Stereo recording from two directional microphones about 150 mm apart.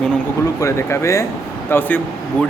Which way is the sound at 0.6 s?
20° left (ahead or behind).